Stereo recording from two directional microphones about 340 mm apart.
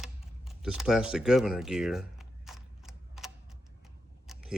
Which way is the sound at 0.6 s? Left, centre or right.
Centre.